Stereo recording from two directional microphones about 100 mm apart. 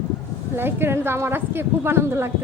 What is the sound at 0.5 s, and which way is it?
A woman's voice, 20° right (ahead or behind).